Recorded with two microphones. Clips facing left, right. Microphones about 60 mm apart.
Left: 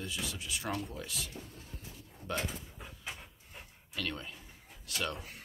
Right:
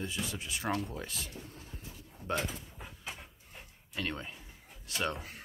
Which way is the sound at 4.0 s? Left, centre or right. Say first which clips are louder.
Right 1 dB; right.